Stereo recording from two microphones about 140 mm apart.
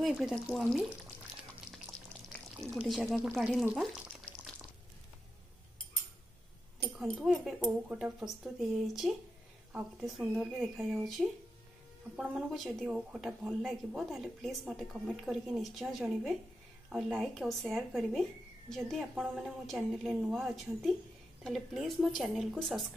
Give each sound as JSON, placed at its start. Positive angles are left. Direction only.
{"t": 0.0, "sound": "speech", "side_deg": 0}
{"t": 2.5, "sound": "speech", "side_deg": -5}
{"t": 6.8, "sound": "speech", "side_deg": 0}
{"t": 10.8, "sound": "speech", "side_deg": -15}
{"t": 12.2, "sound": "speech", "side_deg": 0}